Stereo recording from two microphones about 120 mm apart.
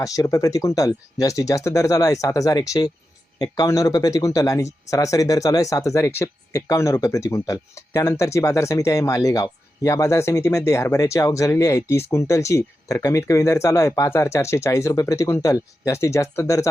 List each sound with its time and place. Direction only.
0.0 s speech: 30° left (ahead or behind)